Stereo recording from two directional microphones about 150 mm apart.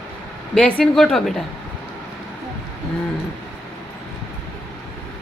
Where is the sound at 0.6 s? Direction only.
5° left (ahead or behind).